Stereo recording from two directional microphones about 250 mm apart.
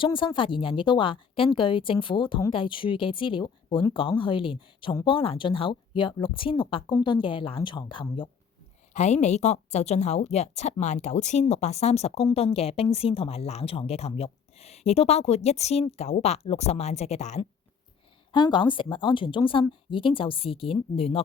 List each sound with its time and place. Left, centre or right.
0.0 s a woman's voice: centre